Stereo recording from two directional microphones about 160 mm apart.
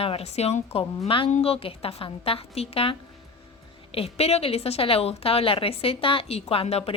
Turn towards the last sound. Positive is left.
turn(degrees=40)  # may be behind; listen again after turning